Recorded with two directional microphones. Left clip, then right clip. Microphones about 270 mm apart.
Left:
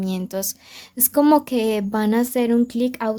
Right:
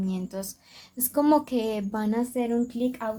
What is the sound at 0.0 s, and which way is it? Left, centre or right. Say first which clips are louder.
A woman's voice: left 7 dB; left.